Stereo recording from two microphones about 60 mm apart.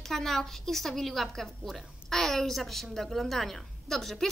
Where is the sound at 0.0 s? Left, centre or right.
Centre.